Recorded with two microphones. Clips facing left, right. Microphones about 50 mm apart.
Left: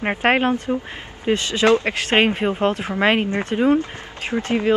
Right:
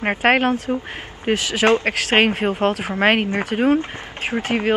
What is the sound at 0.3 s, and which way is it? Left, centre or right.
Speech, centre.